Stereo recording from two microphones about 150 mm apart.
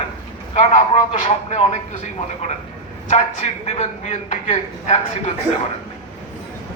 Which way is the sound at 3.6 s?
45° left (ahead or behind).